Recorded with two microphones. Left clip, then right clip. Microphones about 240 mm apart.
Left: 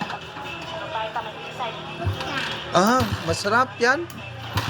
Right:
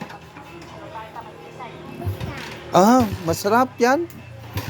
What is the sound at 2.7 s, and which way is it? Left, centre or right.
Speech, right.